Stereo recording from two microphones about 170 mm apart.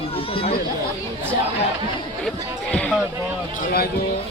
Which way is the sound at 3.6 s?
55° left (ahead or behind).